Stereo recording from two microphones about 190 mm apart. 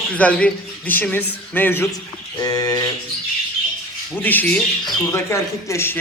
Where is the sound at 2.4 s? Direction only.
20° left (ahead or behind).